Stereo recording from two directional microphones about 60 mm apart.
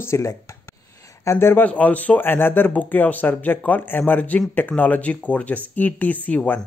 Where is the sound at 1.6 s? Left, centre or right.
Left.